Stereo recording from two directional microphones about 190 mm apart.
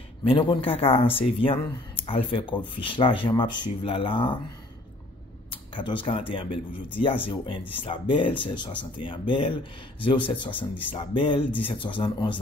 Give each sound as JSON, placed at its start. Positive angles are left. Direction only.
{"t": 0.2, "sound": "speech", "side_deg": 25}
{"t": 5.5, "sound": "speech", "side_deg": 25}